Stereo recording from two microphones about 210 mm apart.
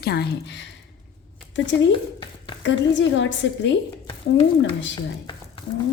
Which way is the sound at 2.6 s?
60° left (ahead or behind).